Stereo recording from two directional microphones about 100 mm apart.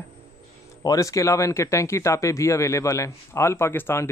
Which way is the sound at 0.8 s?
35° left (ahead or behind).